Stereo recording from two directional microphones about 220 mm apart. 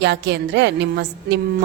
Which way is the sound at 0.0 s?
50° right (ahead or behind).